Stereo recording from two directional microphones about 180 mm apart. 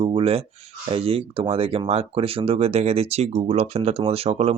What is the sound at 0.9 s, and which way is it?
Speech, 30° right (ahead or behind).